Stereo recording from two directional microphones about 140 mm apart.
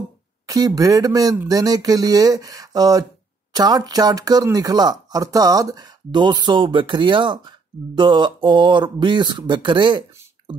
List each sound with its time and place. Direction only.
0.5 s speech: 25° right (ahead or behind)